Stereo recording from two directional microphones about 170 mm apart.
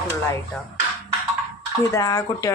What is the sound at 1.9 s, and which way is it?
Speech, 20° left (ahead or behind).